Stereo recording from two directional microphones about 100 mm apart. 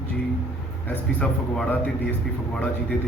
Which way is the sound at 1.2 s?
10° left (ahead or behind).